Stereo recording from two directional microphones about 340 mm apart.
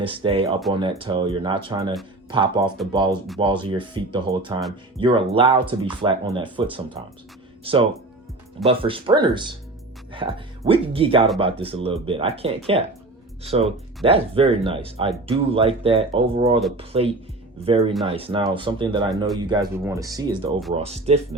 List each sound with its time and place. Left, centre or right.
0.0 s speech: centre